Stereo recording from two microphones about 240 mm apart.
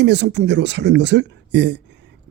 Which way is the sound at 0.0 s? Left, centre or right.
Right.